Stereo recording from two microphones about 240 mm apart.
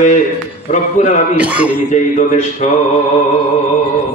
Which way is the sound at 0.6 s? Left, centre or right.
Left.